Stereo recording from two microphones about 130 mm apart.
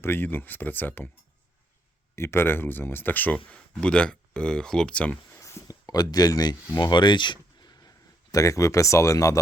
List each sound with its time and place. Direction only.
0.0 s speech: 15° left (ahead or behind)
2.1 s speech: 20° left (ahead or behind)
5.4 s speech: 25° left (ahead or behind)